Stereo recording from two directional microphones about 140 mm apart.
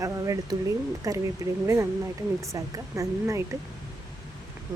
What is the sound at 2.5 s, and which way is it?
Speech, 25° right (ahead or behind).